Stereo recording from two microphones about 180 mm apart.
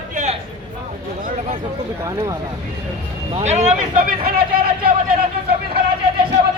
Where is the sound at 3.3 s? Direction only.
40° right (ahead or behind).